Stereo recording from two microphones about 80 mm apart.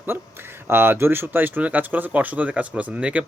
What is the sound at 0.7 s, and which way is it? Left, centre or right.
Speech, right.